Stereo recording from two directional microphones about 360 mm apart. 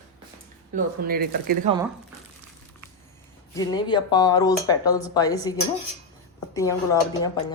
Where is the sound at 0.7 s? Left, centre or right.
Right.